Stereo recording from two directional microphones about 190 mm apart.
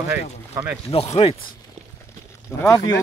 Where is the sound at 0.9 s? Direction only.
30° left (ahead or behind).